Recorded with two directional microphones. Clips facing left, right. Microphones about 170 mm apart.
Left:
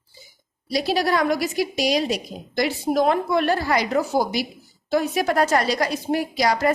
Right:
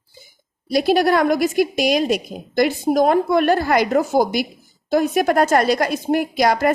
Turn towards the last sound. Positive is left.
turn(degrees=-55)  # may be behind; listen again after turning